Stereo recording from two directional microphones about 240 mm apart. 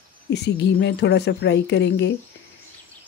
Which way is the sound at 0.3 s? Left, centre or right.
Left.